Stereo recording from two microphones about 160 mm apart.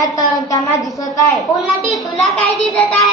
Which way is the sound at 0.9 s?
20° left (ahead or behind).